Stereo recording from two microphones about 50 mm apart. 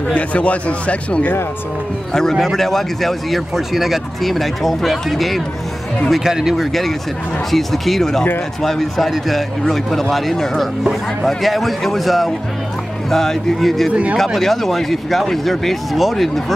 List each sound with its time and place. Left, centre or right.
0.1 s speech: left
2.3 s speech: centre